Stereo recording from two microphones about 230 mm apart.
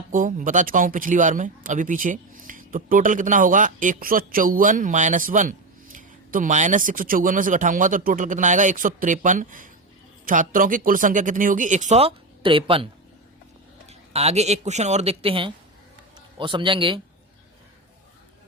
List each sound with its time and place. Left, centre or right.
0.1 s speech: right